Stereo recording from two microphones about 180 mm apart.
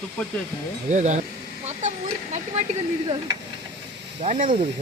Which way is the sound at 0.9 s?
40° right (ahead or behind).